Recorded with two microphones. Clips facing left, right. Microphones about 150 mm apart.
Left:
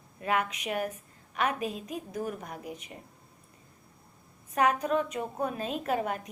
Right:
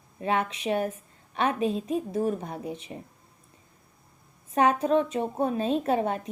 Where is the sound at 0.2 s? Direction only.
30° right (ahead or behind).